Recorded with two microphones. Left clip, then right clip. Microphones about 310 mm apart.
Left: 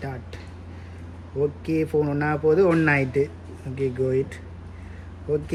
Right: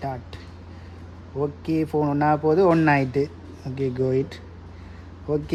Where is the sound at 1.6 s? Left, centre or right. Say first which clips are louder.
Right 2 dB; right.